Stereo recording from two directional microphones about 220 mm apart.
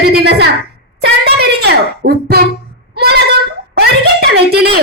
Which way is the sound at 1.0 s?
50° right (ahead or behind).